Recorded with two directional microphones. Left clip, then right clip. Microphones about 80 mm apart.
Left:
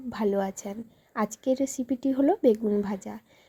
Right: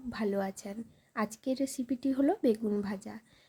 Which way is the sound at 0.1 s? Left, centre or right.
Left.